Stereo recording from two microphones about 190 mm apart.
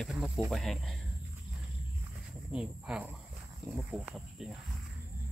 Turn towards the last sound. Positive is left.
turn(degrees=-5)  # may be behind; listen again after turning